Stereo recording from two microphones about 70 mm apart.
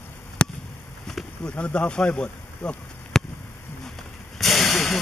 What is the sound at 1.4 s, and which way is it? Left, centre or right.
Speech, centre.